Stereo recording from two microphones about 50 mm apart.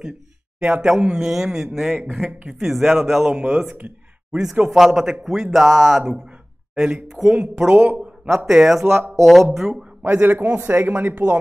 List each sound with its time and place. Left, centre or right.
0.6 s speech: centre
6.7 s a sound: centre
7.2 s speech: right
8.5 s speech: centre
10.1 s speech: right